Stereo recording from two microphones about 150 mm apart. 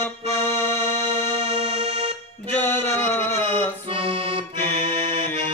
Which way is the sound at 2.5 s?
10° left (ahead or behind).